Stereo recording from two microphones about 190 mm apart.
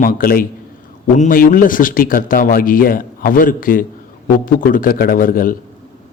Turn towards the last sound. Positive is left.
turn(degrees=45)  # may be behind; listen again after turning